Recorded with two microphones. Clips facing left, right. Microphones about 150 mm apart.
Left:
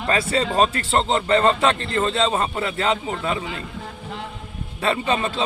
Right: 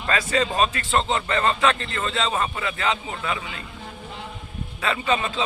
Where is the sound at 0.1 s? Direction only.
30° left (ahead or behind).